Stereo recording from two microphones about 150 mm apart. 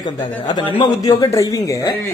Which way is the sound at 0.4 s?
30° left (ahead or behind).